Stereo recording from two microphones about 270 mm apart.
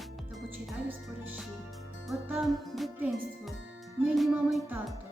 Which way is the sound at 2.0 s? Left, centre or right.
Centre.